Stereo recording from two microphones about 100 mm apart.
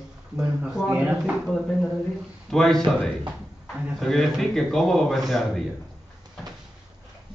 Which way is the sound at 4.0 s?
Centre (ahead or behind).